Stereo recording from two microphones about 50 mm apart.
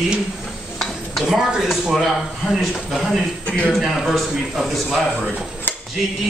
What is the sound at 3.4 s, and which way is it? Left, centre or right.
Speech, left.